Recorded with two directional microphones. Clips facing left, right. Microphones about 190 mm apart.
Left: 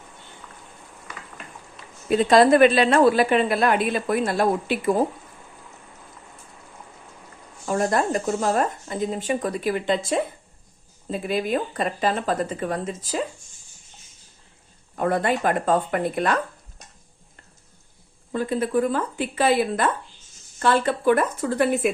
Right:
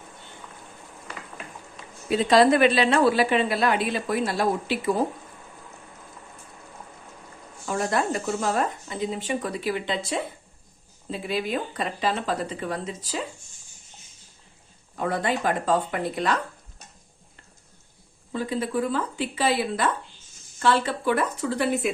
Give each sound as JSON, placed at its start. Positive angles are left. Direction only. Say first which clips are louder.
{"t": 2.0, "sound": "a woman's voice", "louder": "left 2 dB", "side_deg": 50}
{"t": 7.7, "sound": "a woman's voice", "louder": "left 3 dB", "side_deg": 45}
{"t": 14.9, "sound": "a woman's voice", "louder": "left 4 dB", "side_deg": 50}
{"t": 18.3, "sound": "a woman's voice", "louder": "left 4 dB", "side_deg": 55}